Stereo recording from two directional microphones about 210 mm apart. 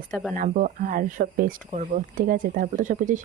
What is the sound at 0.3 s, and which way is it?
Speech, 35° right (ahead or behind).